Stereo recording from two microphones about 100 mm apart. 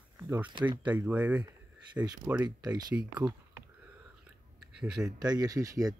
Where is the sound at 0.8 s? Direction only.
15° right (ahead or behind).